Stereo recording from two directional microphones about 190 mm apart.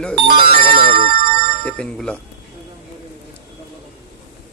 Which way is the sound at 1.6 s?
5° left (ahead or behind).